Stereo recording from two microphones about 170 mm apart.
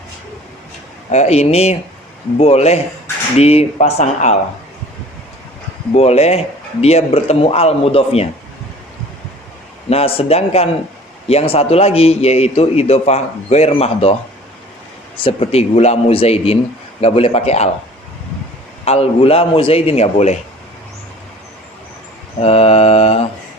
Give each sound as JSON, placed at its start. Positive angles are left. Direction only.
{"t": 1.1, "sound": "a man's voice", "side_deg": 40}
{"t": 5.9, "sound": "a man's voice", "side_deg": 40}
{"t": 9.9, "sound": "a man's voice", "side_deg": 35}
{"t": 18.9, "sound": "a man's voice", "side_deg": 35}
{"t": 22.4, "sound": "a man's voice", "side_deg": 35}